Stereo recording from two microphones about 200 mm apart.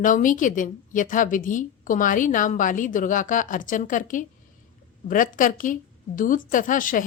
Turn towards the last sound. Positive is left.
turn(degrees=40)  # may be behind; listen again after turning